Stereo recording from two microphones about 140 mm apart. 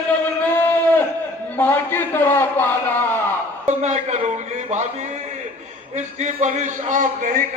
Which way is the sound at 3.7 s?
55° right (ahead or behind).